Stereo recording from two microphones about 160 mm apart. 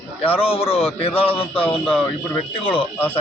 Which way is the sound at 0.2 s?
35° left (ahead or behind).